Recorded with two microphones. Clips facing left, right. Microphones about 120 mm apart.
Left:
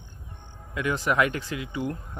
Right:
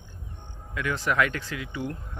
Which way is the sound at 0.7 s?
15° left (ahead or behind).